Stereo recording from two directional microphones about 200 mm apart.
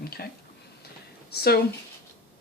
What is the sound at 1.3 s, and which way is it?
Speech, 50° left (ahead or behind).